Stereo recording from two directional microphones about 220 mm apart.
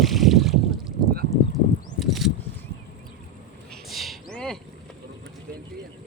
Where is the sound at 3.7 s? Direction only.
Centre (ahead or behind).